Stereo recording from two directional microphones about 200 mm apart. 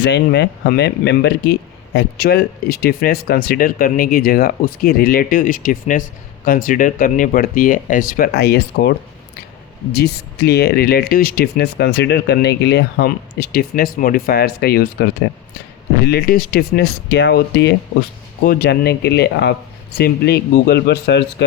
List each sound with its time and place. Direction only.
0.0 s speech: 60° left (ahead or behind)
9.9 s speech: 50° left (ahead or behind)
16.0 s speech: 50° left (ahead or behind)